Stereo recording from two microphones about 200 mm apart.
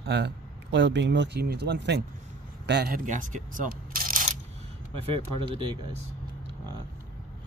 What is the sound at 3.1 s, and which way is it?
Speech, 40° right (ahead or behind).